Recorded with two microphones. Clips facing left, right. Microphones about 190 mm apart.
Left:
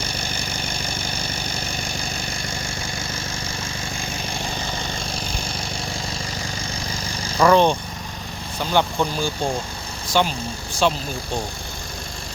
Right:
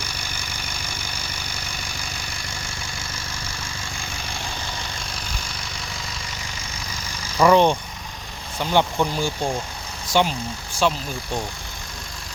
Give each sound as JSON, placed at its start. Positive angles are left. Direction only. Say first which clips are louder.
{"t": 5.1, "sound": "vehicle", "louder": "left 5 dB", "side_deg": 30}
{"t": 7.3, "sound": "speech", "louder": "even", "side_deg": -10}
{"t": 10.8, "sound": "speech", "louder": "left 1 dB", "side_deg": -5}